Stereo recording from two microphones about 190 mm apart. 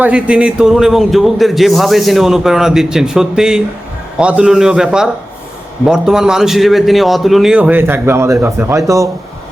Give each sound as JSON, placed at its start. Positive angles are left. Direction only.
{"t": 0.0, "sound": "a man's voice", "side_deg": -5}